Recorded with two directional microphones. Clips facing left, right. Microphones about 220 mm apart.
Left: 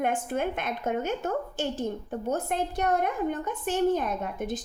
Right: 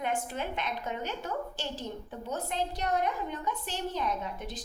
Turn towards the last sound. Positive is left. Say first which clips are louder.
# left 6 dB
turn(degrees=50)  # may be behind; listen again after turning